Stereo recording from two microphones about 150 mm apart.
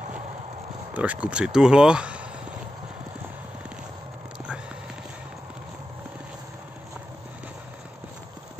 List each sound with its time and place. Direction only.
0.9 s speech: 10° right (ahead or behind)